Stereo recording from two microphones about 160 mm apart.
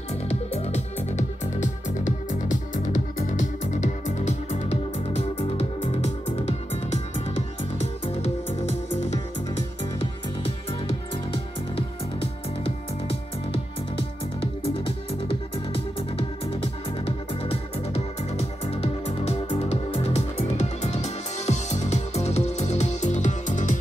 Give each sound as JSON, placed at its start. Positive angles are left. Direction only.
{"t": 0.3, "sound": "music", "side_deg": 40}
{"t": 11.7, "sound": "music", "side_deg": 35}
{"t": 17.0, "sound": "music", "side_deg": 35}